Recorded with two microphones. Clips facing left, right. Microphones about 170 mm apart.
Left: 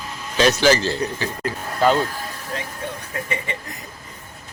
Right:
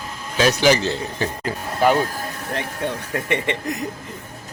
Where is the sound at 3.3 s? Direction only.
80° right.